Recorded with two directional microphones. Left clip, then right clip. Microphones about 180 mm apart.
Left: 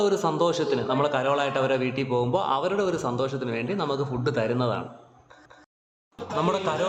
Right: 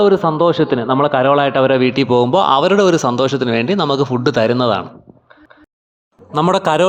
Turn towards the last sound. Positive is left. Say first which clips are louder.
# right 12 dB
turn(degrees=-55)  # may be behind; listen again after turning